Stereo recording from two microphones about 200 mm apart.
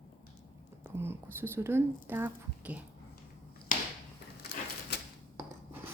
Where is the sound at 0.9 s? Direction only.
10° right (ahead or behind).